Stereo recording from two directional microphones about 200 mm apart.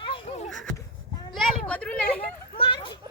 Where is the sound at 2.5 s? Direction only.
25° left (ahead or behind).